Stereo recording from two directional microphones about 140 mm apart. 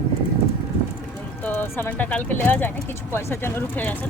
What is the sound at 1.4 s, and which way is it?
Speech, 15° left (ahead or behind).